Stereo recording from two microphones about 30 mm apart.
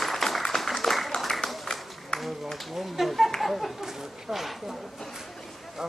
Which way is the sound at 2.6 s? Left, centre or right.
Centre.